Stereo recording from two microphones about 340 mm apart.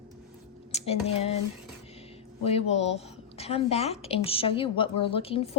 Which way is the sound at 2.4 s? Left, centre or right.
Centre.